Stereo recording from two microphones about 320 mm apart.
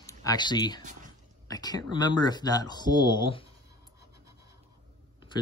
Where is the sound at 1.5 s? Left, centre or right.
Centre.